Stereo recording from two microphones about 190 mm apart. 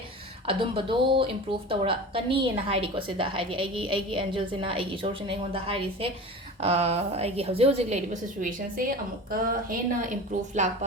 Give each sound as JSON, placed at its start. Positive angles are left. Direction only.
{"t": 0.4, "sound": "a woman's voice", "side_deg": -30}